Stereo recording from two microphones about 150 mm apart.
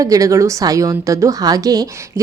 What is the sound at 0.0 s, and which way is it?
A woman's voice, 25° right (ahead or behind).